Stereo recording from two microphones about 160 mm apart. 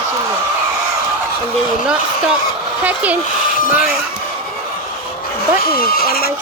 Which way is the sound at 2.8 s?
10° right (ahead or behind).